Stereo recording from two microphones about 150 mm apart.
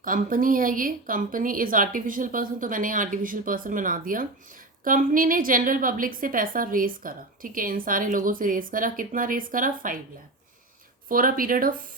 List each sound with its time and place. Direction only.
0.0 s a woman's voice: 65° right (ahead or behind)
11.1 s speech: 70° right (ahead or behind)